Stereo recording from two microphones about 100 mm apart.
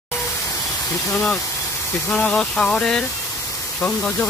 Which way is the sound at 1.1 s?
10° left (ahead or behind).